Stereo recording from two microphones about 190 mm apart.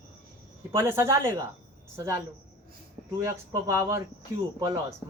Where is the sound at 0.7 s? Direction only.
15° right (ahead or behind).